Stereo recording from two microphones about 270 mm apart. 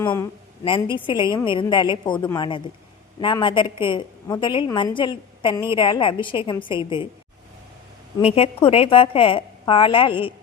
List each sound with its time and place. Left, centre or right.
0.0 s a woman's voice: centre
8.2 s a woman's voice: left